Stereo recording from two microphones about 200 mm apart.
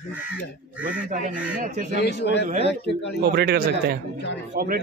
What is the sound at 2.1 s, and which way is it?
A man's voice, 55° left (ahead or behind).